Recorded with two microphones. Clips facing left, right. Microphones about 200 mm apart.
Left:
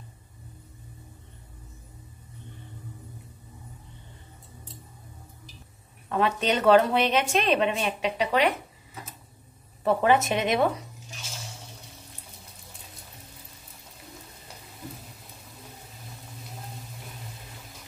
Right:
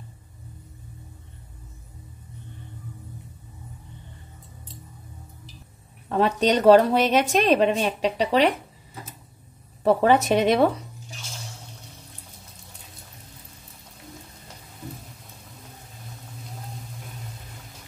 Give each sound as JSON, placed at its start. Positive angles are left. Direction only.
{"t": 6.0, "sound": "a woman's voice", "side_deg": -35}
{"t": 9.8, "sound": "a woman's voice", "side_deg": -35}